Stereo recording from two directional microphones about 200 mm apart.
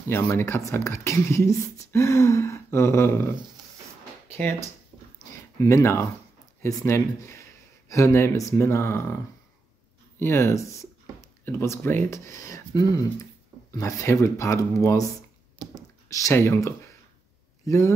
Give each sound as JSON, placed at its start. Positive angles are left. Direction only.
{"t": 0.1, "sound": "speech", "side_deg": 10}
{"t": 5.6, "sound": "speech", "side_deg": 15}
{"t": 15.7, "sound": "a sound", "side_deg": 15}
{"t": 17.6, "sound": "speech", "side_deg": 15}